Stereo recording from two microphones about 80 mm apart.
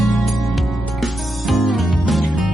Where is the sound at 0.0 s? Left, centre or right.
Centre.